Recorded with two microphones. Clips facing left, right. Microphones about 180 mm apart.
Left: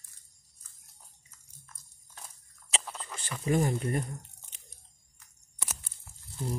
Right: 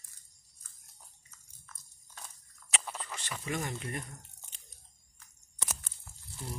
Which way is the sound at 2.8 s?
Centre (ahead or behind).